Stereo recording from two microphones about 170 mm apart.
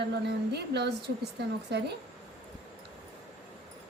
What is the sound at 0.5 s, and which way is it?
Speech, 75° right (ahead or behind).